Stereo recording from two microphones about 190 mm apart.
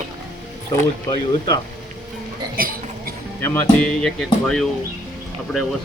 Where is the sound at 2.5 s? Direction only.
50° right (ahead or behind).